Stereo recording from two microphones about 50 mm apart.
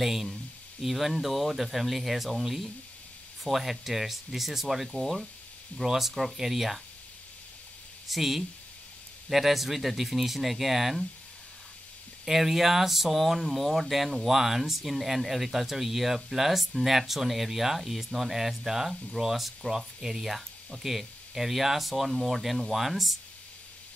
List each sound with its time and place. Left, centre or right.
0.0 s speech: centre
8.1 s speech: centre
12.3 s speech: centre